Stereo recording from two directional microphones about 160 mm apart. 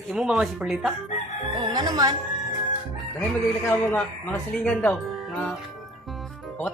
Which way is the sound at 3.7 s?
10° left (ahead or behind).